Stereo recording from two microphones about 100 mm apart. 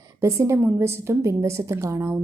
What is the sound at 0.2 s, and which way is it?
A woman's voice, 30° right (ahead or behind).